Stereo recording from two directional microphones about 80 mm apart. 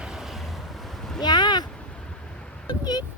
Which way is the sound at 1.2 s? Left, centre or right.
Left.